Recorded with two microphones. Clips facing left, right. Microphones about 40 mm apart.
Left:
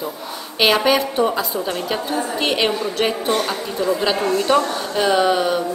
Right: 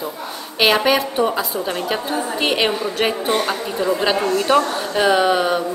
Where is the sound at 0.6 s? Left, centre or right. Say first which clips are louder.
Even; centre.